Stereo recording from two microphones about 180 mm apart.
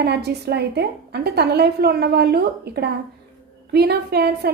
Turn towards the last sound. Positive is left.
turn(degrees=-60)  # may be behind; listen again after turning